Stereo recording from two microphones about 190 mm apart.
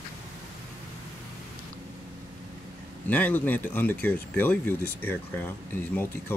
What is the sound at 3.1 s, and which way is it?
Speech, 10° left (ahead or behind).